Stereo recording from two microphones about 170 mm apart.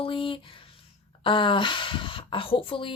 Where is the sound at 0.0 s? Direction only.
30° left (ahead or behind).